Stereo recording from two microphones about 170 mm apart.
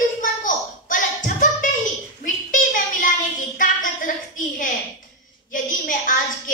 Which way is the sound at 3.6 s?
50° left (ahead or behind).